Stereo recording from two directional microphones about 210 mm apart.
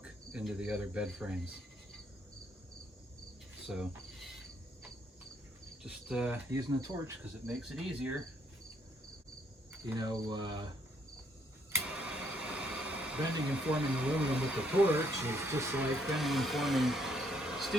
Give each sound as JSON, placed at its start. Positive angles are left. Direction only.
{"t": 0.0, "sound": "cricket", "side_deg": -5}
{"t": 3.7, "sound": "a sound", "side_deg": 0}
{"t": 5.8, "sound": "speech", "side_deg": -5}
{"t": 6.5, "sound": "speech", "side_deg": -15}
{"t": 7.4, "sound": "speech", "side_deg": 0}
{"t": 9.8, "sound": "cricket", "side_deg": -20}
{"t": 11.7, "sound": "speech", "side_deg": -5}